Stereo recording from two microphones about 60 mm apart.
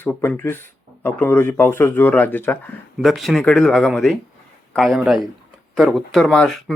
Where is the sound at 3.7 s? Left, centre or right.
Centre.